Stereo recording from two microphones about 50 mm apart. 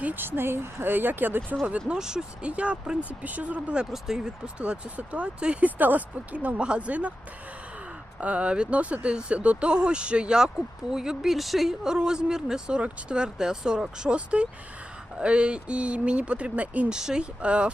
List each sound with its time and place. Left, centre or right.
0.0 s speech: right
1.9 s speech: centre
2.4 s speech: right
3.9 s speech: centre
4.6 s speech: right
8.2 s speech: right
16.9 s speech: centre